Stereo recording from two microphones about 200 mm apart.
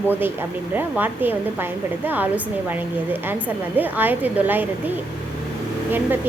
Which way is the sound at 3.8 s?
10° right (ahead or behind).